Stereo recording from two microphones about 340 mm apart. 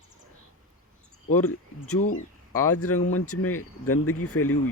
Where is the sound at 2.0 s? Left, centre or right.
Left.